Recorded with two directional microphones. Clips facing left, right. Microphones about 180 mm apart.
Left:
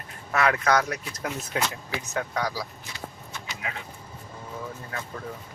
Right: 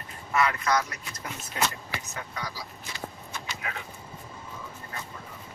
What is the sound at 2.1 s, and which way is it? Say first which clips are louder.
Speech: left 12 dB; 75° left (ahead or behind).